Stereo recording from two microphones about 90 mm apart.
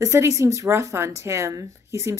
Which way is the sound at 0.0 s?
35° right (ahead or behind).